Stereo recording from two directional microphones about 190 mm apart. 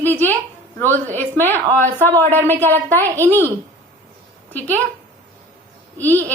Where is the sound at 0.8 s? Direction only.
10° left (ahead or behind).